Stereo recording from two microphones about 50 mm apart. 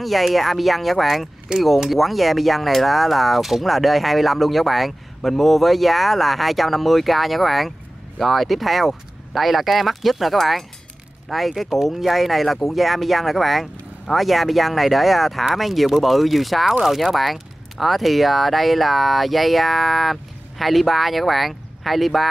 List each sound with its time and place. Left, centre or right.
0.0 s speech: centre